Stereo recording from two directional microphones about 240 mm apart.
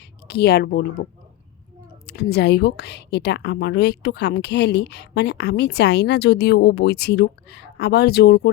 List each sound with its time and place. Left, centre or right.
0.3 s a woman's voice: left
2.0 s a woman's voice: left